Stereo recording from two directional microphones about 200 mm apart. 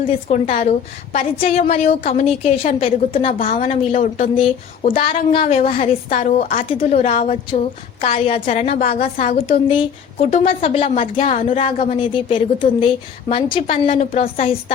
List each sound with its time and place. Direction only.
0.0 s a woman's voice: 30° left (ahead or behind)
3.3 s a woman's voice: 45° left (ahead or behind)
4.4 s speech: 25° left (ahead or behind)
6.1 s a woman's voice: 40° left (ahead or behind)